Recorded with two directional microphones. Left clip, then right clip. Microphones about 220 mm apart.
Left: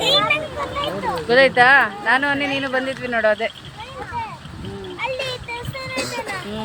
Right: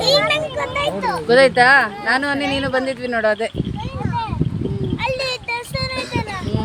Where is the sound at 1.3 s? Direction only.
25° right (ahead or behind).